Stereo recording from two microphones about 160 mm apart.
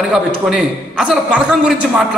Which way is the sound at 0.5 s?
5° right (ahead or behind).